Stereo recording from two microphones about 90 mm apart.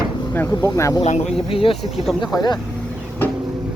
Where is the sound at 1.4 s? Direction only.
90° left.